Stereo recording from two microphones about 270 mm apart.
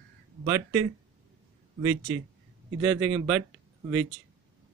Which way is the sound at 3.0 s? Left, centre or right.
Right.